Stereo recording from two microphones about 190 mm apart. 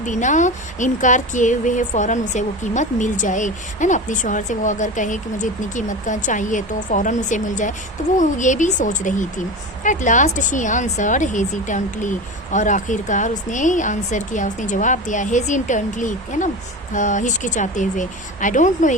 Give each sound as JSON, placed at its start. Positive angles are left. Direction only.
{"t": 0.0, "sound": "speech", "side_deg": 40}